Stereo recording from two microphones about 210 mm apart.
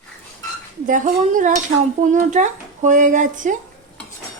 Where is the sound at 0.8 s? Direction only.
40° right (ahead or behind).